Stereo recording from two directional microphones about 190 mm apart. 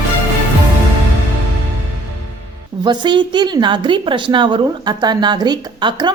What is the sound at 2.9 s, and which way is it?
A woman's voice, 25° right (ahead or behind).